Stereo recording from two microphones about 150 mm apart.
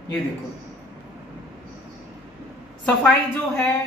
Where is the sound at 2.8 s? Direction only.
5° left (ahead or behind).